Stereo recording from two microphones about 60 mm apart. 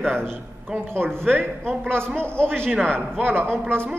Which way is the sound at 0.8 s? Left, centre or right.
Right.